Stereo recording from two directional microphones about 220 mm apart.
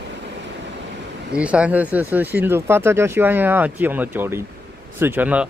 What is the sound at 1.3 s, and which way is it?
Speech, 5° right (ahead or behind).